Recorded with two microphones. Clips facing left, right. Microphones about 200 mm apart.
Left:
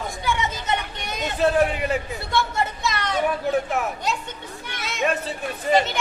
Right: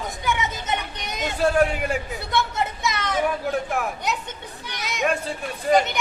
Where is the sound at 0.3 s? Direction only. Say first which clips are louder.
Left 1 dB; 20° right (ahead or behind).